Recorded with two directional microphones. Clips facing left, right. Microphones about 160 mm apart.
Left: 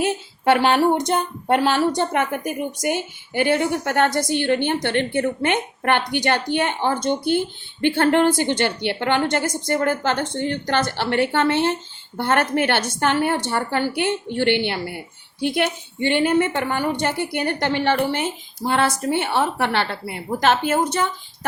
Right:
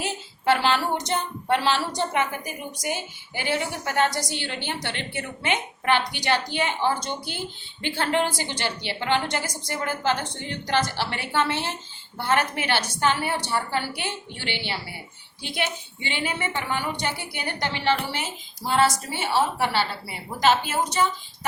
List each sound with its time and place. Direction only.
0.0 s a woman's voice: 60° left (ahead or behind)